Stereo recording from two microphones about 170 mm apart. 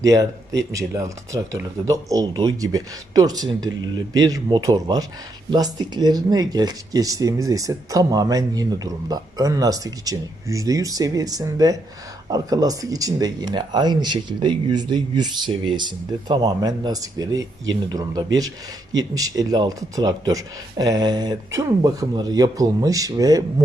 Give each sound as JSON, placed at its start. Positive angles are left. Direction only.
{"t": 0.0, "sound": "speech", "side_deg": -20}